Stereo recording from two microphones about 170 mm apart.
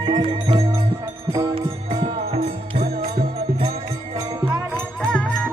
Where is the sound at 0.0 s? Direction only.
25° right (ahead or behind).